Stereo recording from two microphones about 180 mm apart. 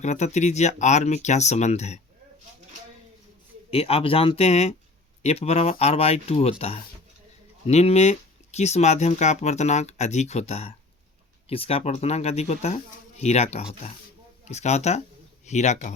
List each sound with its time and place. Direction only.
0.0 s speech: 40° left (ahead or behind)
3.7 s speech: 30° left (ahead or behind)